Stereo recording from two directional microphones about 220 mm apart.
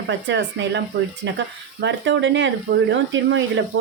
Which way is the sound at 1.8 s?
55° right (ahead or behind).